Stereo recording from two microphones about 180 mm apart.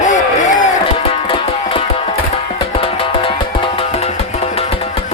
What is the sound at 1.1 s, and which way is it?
Music, 30° left (ahead or behind).